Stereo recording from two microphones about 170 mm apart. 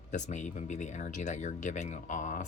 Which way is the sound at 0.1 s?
45° left (ahead or behind).